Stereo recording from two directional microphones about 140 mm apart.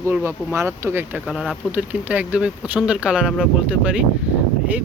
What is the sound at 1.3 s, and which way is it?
Speech, 5° right (ahead or behind).